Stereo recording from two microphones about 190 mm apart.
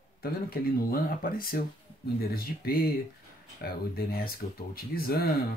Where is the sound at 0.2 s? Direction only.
50° left (ahead or behind).